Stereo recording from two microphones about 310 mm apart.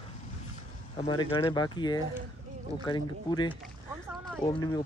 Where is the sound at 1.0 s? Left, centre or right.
Centre.